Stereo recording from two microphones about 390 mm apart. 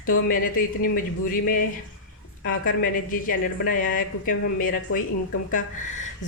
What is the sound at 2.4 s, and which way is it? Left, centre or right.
A woman's voice, left.